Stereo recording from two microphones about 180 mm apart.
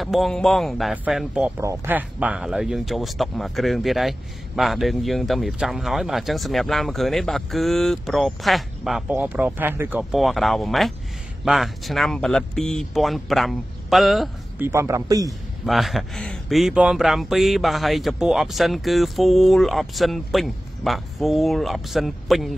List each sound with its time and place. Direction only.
0.0 s speech: centre (ahead or behind)
10.1 s speech: centre (ahead or behind)
14.6 s speech: 15° right (ahead or behind)
15.6 s speech: centre (ahead or behind)